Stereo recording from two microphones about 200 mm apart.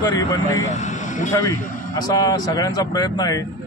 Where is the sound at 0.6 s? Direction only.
35° left (ahead or behind).